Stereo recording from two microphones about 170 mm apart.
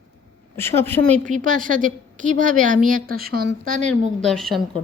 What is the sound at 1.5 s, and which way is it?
A woman's voice, 50° right (ahead or behind).